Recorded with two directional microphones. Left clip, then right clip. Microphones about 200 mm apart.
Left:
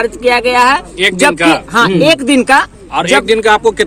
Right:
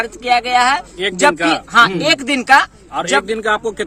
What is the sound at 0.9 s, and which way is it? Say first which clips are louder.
Speech: left 4 dB; 50° right (ahead or behind).